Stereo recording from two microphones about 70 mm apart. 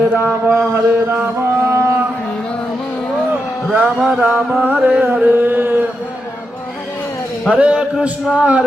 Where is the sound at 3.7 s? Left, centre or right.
Centre.